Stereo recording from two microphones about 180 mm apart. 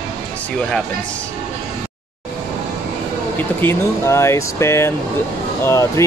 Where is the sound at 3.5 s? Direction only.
15° left (ahead or behind).